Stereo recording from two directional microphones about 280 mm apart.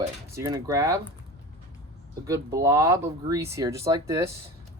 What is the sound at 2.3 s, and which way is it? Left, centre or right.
Speech, centre.